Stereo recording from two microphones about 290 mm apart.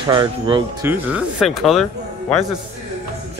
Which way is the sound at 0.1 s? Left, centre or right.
Centre.